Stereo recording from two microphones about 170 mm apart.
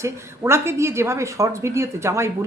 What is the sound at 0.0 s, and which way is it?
Speech, 15° right (ahead or behind).